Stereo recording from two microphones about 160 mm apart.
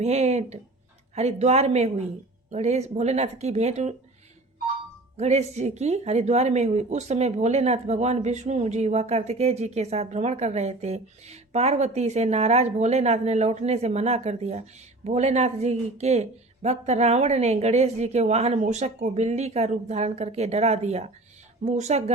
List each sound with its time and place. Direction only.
0.0 s speech: 45° right (ahead or behind)
5.1 s speech: 40° right (ahead or behind)